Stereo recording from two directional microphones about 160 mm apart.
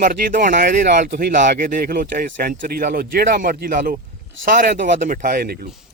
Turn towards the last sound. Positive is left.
turn(degrees=-65)  # may be behind; listen again after turning